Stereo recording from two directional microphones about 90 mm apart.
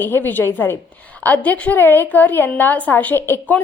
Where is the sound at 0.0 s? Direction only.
25° left (ahead or behind).